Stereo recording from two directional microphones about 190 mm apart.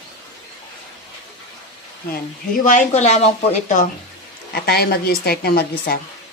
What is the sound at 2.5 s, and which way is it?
Speech, 40° left (ahead or behind).